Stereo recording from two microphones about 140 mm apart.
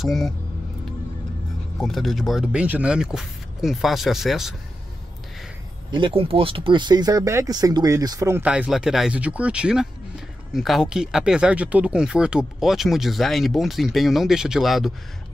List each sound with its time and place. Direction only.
0.0 s speech: centre (ahead or behind)
1.8 s speech: centre (ahead or behind)
5.9 s speech: 35° right (ahead or behind)
8.5 s speech: 5° right (ahead or behind)